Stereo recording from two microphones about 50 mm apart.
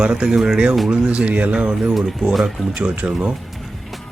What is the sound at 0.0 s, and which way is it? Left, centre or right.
Speech, centre.